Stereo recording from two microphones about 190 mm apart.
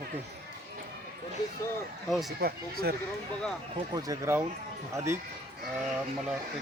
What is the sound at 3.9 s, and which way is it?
A man's voice, 15° right (ahead or behind).